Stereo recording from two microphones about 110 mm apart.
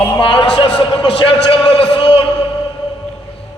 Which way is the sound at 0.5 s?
55° left (ahead or behind).